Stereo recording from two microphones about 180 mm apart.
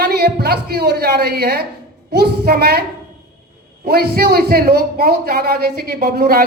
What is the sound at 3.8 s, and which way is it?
Speech, 60° right (ahead or behind).